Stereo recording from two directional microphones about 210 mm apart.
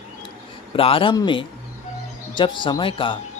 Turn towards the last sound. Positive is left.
turn(degrees=25)  # may be behind; listen again after turning